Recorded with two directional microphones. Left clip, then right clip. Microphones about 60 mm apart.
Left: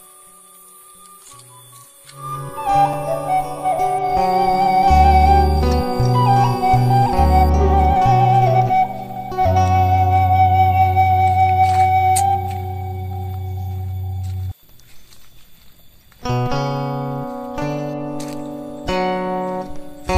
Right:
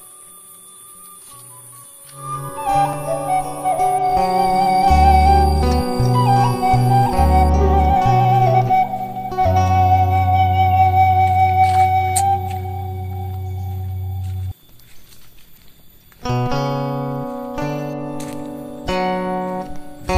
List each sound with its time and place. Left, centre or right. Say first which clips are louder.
2.1 s music: right 1 dB; centre
16.2 s music: even; centre
18.1 s music: left 1 dB; left
18.4 s music: left 1 dB; centre